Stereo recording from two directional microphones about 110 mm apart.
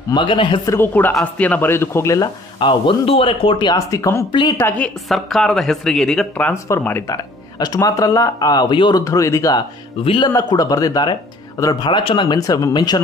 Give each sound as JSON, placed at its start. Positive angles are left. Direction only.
{"t": 0.1, "sound": "a man's voice", "side_deg": 45}
{"t": 0.7, "sound": "a man's voice", "side_deg": 20}
{"t": 2.6, "sound": "a man's voice", "side_deg": 50}
{"t": 3.9, "sound": "a man's voice", "side_deg": 30}
{"t": 4.3, "sound": "a man's voice", "side_deg": 45}
{"t": 4.6, "sound": "a woman's voice", "side_deg": 15}
{"t": 5.0, "sound": "speech", "side_deg": 0}
{"t": 6.8, "sound": "a man's voice", "side_deg": 20}
{"t": 7.5, "sound": "a man's voice", "side_deg": 35}
{"t": 9.0, "sound": "a man's voice", "side_deg": 30}
{"t": 10.0, "sound": "a man's voice", "side_deg": 45}
{"t": 10.3, "sound": "a man's voice", "side_deg": 35}
{"t": 12.0, "sound": "speech", "side_deg": 55}
{"t": 12.3, "sound": "a man's voice", "side_deg": 30}